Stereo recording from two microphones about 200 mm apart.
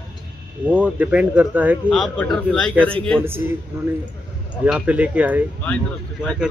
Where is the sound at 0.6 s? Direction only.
5° right (ahead or behind).